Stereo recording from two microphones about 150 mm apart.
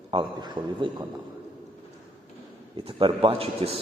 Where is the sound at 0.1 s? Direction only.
35° right (ahead or behind).